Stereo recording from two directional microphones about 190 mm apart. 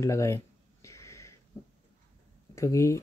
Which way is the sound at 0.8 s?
15° left (ahead or behind).